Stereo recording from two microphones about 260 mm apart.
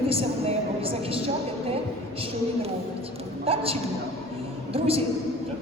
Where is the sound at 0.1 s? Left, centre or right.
Right.